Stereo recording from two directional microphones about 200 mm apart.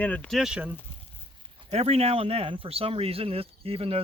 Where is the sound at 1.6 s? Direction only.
30° right (ahead or behind).